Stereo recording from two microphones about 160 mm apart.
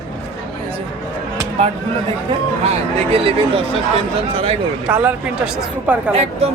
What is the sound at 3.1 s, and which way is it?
Speech, 35° right (ahead or behind).